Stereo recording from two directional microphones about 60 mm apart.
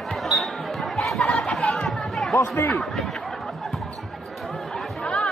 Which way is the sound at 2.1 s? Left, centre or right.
Centre.